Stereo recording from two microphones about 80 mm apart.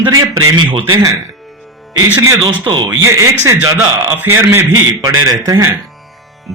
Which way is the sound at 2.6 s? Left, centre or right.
Right.